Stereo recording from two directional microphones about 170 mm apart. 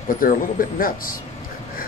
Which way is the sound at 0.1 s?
55° left (ahead or behind).